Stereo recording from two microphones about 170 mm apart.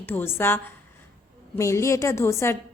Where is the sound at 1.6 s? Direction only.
15° left (ahead or behind).